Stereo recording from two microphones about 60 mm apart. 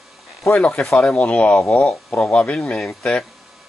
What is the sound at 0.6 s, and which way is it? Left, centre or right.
Speech, centre.